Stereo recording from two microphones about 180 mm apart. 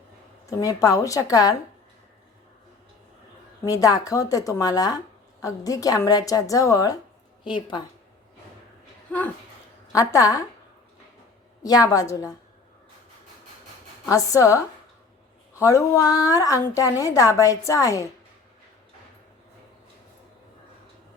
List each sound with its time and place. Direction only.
0.6 s a woman's voice: 20° left (ahead or behind)
3.7 s a woman's voice: 20° left (ahead or behind)
9.9 s a woman's voice: 20° left (ahead or behind)
11.6 s a woman's voice: 20° left (ahead or behind)
14.1 s a woman's voice: 20° left (ahead or behind)